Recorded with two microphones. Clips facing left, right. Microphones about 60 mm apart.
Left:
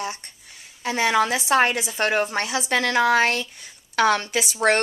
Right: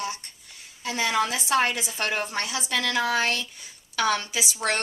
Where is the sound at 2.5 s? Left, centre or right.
Left.